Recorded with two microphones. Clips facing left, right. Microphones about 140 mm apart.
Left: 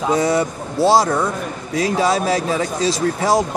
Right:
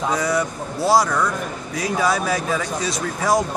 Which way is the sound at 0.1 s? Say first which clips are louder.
Left 7 dB; 25° left (ahead or behind).